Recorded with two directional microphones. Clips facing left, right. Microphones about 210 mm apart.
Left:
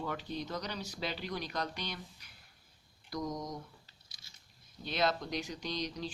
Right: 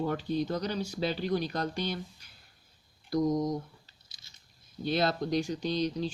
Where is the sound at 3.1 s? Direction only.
25° right (ahead or behind).